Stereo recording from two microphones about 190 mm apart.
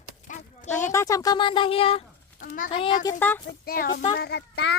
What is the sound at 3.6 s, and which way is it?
A child's voice, 50° left (ahead or behind).